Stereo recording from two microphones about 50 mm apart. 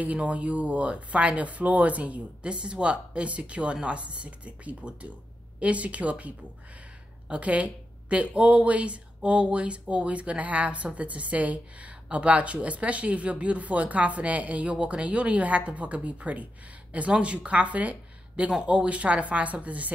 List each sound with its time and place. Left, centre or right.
0.0 s a woman's voice: right